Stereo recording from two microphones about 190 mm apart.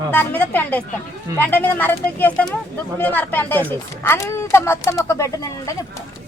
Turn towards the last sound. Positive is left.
turn(degrees=15)  # may be behind; listen again after turning